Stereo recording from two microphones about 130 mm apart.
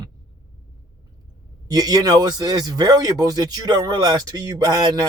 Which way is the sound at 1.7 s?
30° right (ahead or behind).